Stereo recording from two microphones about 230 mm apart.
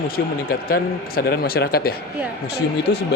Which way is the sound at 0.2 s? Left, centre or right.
Left.